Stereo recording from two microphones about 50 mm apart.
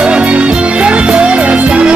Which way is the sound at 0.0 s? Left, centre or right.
Right.